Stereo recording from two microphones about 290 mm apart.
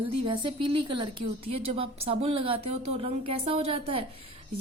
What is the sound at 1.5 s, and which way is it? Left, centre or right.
Speech, right.